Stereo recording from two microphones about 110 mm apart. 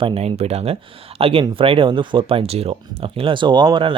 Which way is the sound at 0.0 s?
60° right (ahead or behind).